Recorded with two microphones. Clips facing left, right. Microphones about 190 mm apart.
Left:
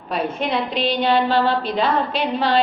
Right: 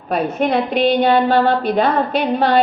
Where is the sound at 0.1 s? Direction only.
50° right (ahead or behind).